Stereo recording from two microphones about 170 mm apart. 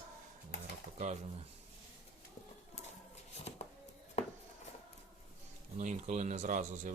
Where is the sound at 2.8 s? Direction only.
40° left (ahead or behind).